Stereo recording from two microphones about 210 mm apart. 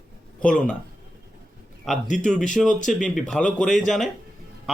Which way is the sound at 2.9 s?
Centre (ahead or behind).